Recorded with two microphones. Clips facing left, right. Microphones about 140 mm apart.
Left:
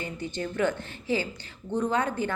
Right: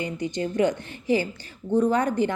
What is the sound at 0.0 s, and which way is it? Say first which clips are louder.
A woman's voice: right 5 dB; 15° right (ahead or behind).